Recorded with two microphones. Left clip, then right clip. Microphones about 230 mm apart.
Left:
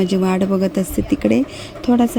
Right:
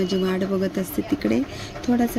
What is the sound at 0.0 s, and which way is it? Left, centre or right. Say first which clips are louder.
Speech: left 5 dB; left.